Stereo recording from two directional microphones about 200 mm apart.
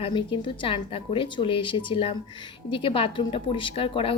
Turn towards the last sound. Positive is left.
turn(degrees=25)  # may be behind; listen again after turning